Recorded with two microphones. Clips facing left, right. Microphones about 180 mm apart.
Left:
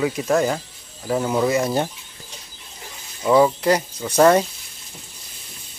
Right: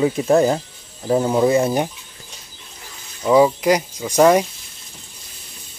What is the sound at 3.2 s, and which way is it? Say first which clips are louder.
Speech: right 2 dB; 10° right (ahead or behind).